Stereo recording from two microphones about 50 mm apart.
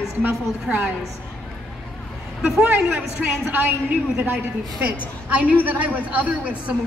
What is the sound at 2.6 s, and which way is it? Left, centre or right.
A woman's voice, right.